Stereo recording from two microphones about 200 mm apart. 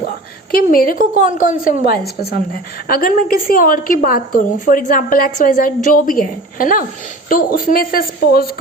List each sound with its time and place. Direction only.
0.5 s a woman's voice: 45° left (ahead or behind)